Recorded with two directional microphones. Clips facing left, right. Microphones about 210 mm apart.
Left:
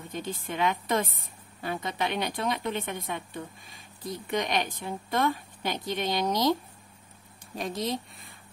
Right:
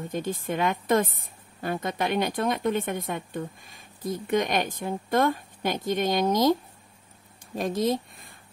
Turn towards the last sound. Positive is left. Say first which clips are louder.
# right 6 dB
turn(degrees=-50)  # may be behind; listen again after turning